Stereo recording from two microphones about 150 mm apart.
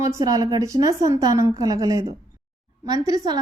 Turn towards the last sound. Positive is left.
turn(degrees=-25)  # may be behind; listen again after turning